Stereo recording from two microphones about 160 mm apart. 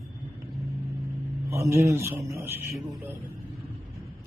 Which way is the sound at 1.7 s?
15° right (ahead or behind).